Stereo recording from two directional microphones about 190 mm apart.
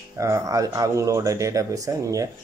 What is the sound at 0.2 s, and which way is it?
Speech, 15° right (ahead or behind).